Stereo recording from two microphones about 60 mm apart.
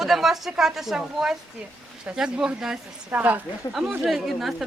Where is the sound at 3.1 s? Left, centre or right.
Right.